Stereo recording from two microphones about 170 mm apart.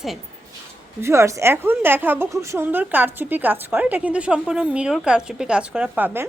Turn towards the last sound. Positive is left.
turn(degrees=-10)  # may be behind; listen again after turning